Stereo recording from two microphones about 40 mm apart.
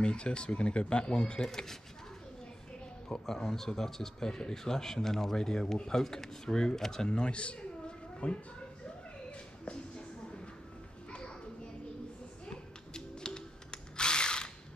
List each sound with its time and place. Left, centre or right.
0.0 s speech: left
3.1 s speech: centre; by 8.4 s left
9.7 s a sound: left
11.1 s children playing: left
12.4 s drill: centre